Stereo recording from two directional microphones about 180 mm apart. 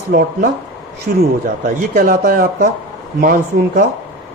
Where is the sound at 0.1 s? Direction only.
55° right (ahead or behind).